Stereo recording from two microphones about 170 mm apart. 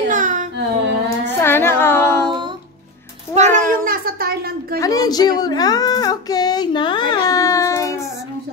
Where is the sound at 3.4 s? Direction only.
45° right (ahead or behind); by 4.7 s 60° right (ahead or behind).